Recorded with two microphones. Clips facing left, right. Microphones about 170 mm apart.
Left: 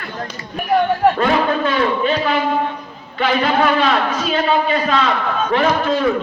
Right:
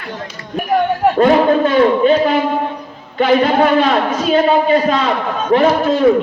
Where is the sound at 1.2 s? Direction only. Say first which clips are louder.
Right 6 dB; 40° right (ahead or behind).